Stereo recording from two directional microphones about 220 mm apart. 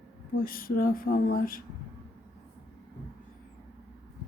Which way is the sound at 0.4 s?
40° left (ahead or behind).